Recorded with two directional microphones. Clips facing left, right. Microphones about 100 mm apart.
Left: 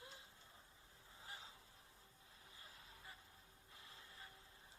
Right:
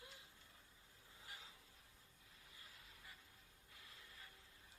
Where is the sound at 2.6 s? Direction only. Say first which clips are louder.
Left 3 dB; 30° left (ahead or behind).